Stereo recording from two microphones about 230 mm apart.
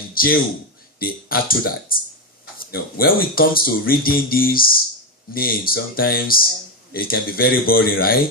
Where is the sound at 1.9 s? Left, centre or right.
Left.